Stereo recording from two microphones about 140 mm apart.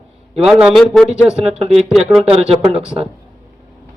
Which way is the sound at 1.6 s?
45° right (ahead or behind).